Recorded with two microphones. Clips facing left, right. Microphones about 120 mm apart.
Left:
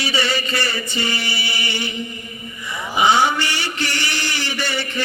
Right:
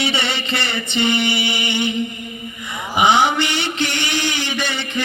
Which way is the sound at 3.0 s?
20° right (ahead or behind).